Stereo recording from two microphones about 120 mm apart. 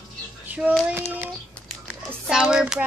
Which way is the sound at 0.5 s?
10° right (ahead or behind).